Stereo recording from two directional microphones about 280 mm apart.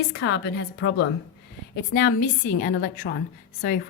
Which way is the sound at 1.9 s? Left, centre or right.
Left.